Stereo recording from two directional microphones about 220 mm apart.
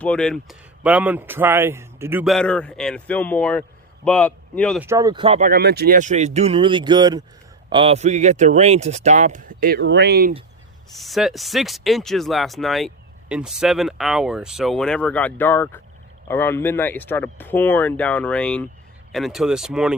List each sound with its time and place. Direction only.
0.0 s speech: 5° left (ahead or behind)
4.8 s speech: 15° right (ahead or behind)
5.4 s speech: 45° right (ahead or behind)
10.9 s speech: centre (ahead or behind)